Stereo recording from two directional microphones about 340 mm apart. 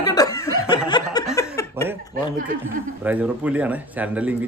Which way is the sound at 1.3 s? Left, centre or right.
Centre.